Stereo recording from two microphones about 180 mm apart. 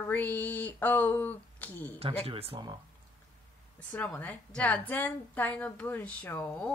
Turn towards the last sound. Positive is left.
turn(degrees=10)  # may be behind; listen again after turning